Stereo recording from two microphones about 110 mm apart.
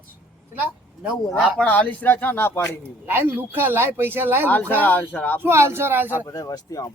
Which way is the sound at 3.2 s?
20° right (ahead or behind).